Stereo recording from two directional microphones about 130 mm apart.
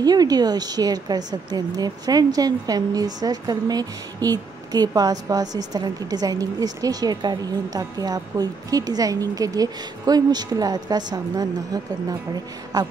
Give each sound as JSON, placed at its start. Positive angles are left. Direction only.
{"t": 0.0, "sound": "a woman's voice", "side_deg": -30}